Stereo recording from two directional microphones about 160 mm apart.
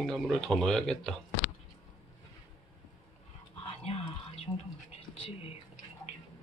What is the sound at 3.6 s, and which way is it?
Whispering, 40° left (ahead or behind).